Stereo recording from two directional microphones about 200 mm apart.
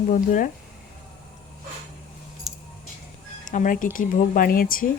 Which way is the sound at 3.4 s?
40° left (ahead or behind).